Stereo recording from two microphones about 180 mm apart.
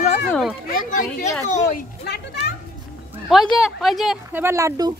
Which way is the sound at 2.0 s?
65° left (ahead or behind).